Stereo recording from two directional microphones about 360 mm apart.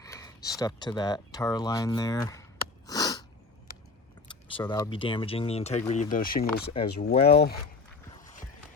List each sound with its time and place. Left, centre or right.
0.0 s a sound: centre
4.3 s speech: centre
8.1 s clip-clop: left